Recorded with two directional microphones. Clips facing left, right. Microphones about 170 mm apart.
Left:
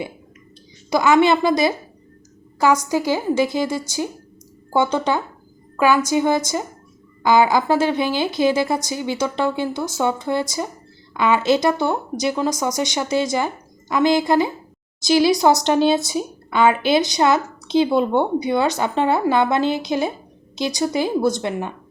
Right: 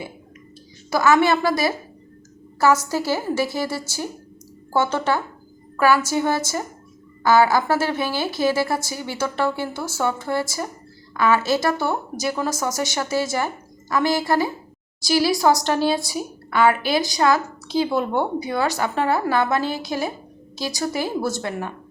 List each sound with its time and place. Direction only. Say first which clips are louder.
0.9 s a woman's voice: left 2 dB; 20° left (ahead or behind)